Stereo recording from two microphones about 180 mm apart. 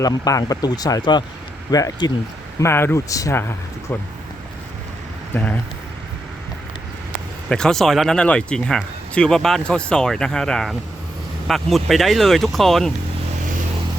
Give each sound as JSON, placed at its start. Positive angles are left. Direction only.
{"t": 0.0, "sound": "speech", "side_deg": 20}
{"t": 5.3, "sound": "speech", "side_deg": 10}
{"t": 7.5, "sound": "speech", "side_deg": 5}